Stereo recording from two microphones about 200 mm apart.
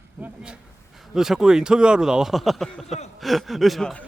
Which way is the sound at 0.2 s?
5° right (ahead or behind).